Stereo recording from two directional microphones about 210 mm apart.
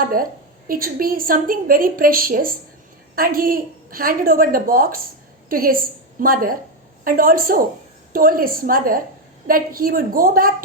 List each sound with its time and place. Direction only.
0.1 s a woman's voice: 45° right (ahead or behind)